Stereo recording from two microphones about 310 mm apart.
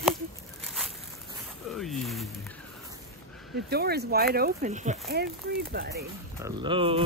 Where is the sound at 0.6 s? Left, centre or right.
Centre.